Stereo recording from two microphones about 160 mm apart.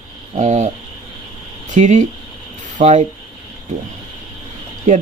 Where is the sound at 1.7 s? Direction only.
50° right (ahead or behind).